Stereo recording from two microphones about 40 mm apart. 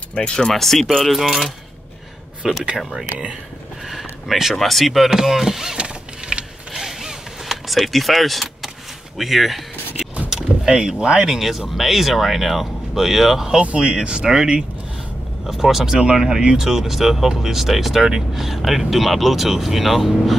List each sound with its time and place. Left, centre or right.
0.1 s speech: left
0.5 s speech: centre
3.9 s a sound: centre
4.6 s speech: centre
5.8 s power windows: right
6.7 s vehicle: centre
9.2 s speech: centre
10.7 s speech: right
11.3 s speech: centre
13.7 s speech: right; by 20.3 s centre